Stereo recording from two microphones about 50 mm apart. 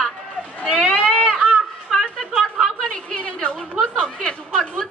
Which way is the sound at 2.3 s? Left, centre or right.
Right.